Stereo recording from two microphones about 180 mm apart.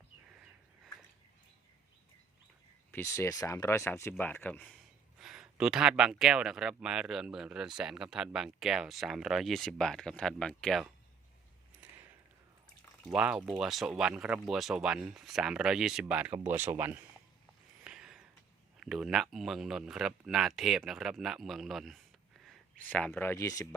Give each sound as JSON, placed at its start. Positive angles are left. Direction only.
{"t": 2.9, "sound": "speech", "side_deg": 15}
{"t": 5.2, "sound": "speech", "side_deg": -5}
{"t": 11.8, "sound": "a sound", "side_deg": -10}
{"t": 13.1, "sound": "speech", "side_deg": -5}
{"t": 17.8, "sound": "a sound", "side_deg": -5}
{"t": 18.8, "sound": "speech", "side_deg": 0}